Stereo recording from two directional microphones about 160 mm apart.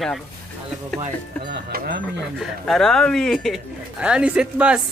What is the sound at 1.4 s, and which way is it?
Speech, 80° right.